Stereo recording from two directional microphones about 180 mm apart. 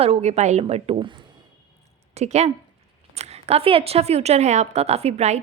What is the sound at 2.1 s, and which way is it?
A woman's voice, 35° right (ahead or behind).